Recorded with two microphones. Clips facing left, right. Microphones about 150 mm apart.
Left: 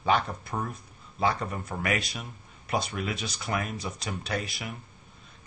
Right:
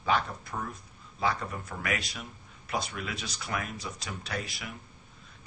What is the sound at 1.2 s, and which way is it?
Speech, 25° left (ahead or behind).